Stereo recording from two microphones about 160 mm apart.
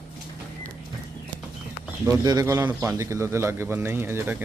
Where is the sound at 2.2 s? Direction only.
25° right (ahead or behind).